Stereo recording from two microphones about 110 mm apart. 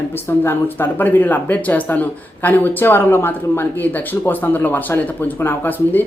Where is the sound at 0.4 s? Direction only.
20° left (ahead or behind).